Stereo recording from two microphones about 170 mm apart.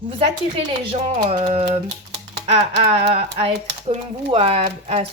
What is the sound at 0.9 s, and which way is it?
Speech, 40° right (ahead or behind).